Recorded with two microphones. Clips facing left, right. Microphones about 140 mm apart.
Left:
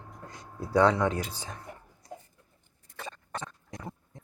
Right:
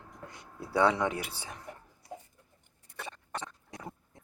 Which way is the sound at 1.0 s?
10° right (ahead or behind).